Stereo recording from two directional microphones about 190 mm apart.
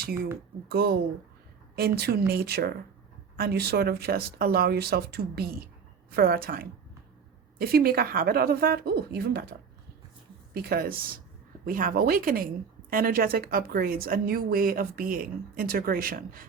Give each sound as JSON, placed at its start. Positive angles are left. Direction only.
{"t": 0.7, "sound": "a woman's voice", "side_deg": -55}